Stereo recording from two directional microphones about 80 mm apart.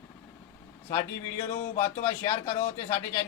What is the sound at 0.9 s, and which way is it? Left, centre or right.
A man's voice, left.